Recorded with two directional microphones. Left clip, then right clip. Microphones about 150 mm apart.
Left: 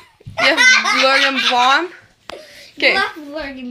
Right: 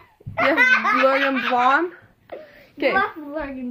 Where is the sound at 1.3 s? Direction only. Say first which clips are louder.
Left 5 dB; 10° left (ahead or behind).